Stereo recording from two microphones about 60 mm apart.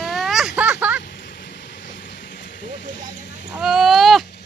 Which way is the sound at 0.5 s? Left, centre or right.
Right.